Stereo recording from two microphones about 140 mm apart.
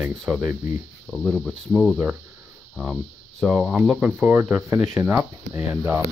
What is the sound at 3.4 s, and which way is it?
Speech, 5° right (ahead or behind).